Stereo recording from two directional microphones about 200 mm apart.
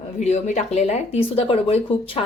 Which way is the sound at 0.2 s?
35° left (ahead or behind).